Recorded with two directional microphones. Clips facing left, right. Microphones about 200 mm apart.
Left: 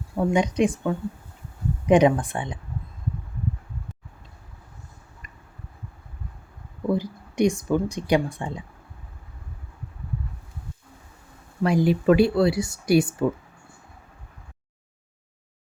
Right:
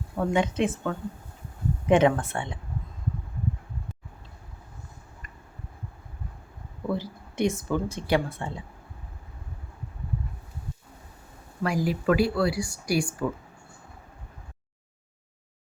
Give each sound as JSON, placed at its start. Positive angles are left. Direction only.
{"t": 0.2, "sound": "a woman's voice", "side_deg": 15}
{"t": 6.8, "sound": "speech", "side_deg": 15}
{"t": 11.6, "sound": "speech", "side_deg": 25}